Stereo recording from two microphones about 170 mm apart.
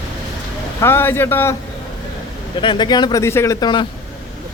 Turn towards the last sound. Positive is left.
turn(degrees=25)  # may be behind; listen again after turning